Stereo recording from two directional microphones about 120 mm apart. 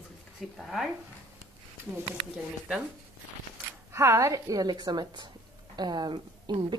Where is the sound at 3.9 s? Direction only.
25° right (ahead or behind).